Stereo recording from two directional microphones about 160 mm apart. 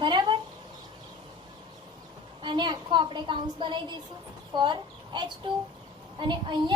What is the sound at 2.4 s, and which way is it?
A woman's voice, 30° right (ahead or behind).